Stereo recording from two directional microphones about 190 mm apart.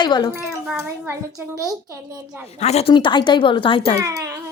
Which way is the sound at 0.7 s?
15° right (ahead or behind).